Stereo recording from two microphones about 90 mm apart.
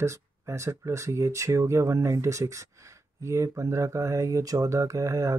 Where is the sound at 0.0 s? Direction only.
35° right (ahead or behind).